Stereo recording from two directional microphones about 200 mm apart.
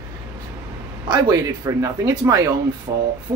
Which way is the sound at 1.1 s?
20° right (ahead or behind).